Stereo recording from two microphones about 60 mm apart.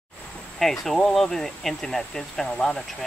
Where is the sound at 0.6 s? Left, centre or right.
Centre.